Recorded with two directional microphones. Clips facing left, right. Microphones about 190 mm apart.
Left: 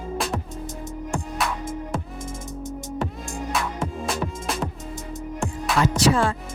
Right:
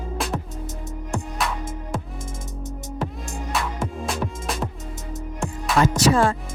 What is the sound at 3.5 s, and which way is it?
Music, centre (ahead or behind).